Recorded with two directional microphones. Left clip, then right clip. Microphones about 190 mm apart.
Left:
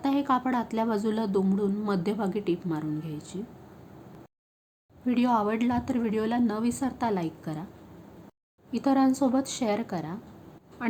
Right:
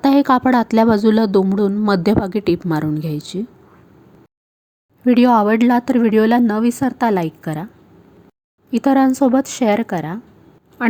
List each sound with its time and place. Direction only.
0.0 s speech: 45° right (ahead or behind)
5.0 s a woman's voice: 40° right (ahead or behind)
8.7 s a woman's voice: 35° right (ahead or behind)